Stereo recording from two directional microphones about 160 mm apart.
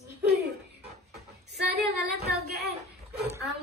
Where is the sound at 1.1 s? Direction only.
90° right.